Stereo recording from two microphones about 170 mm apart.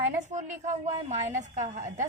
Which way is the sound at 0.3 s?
45° right (ahead or behind).